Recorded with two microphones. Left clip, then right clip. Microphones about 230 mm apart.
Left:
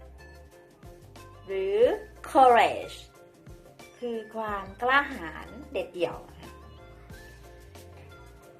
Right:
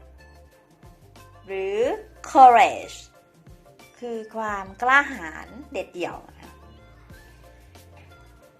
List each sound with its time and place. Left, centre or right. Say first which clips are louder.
1.5 s speech: left 1 dB; right
4.0 s speech: right 3 dB; right